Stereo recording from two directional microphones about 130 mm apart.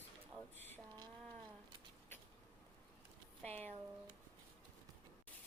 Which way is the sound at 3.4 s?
10° left (ahead or behind).